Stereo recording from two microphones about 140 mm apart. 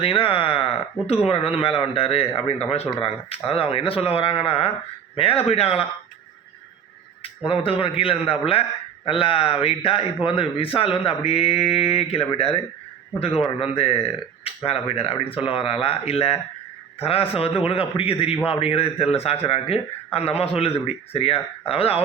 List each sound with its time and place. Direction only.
0.0 s a man's voice: 40° left (ahead or behind)
7.2 s a man's voice: 40° left (ahead or behind)